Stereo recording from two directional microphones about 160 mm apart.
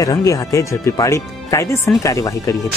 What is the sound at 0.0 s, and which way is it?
Speech, 20° left (ahead or behind).